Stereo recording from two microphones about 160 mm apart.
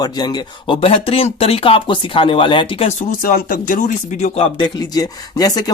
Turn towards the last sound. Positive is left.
turn(degrees=25)  # may be behind; listen again after turning